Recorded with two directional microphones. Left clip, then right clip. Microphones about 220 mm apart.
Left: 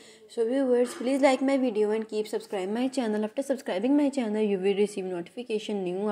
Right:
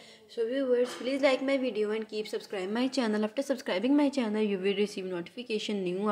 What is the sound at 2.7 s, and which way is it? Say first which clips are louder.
A woman's voice: even; centre (ahead or behind).